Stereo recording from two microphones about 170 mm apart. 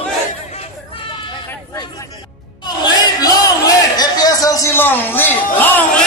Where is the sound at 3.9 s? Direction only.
20° left (ahead or behind).